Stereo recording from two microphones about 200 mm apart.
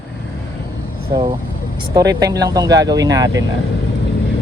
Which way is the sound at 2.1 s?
15° right (ahead or behind).